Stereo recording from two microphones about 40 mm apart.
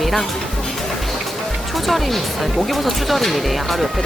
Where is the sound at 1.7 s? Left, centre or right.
Centre.